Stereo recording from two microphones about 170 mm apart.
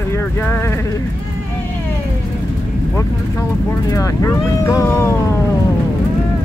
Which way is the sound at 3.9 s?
20° left (ahead or behind).